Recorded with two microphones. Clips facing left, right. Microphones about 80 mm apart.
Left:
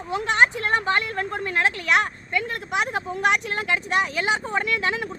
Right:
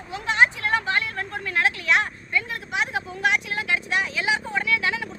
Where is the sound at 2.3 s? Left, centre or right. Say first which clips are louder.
Left 2 dB; left.